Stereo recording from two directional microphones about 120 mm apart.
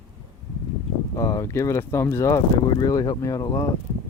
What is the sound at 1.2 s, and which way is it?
Speech, 30° left (ahead or behind).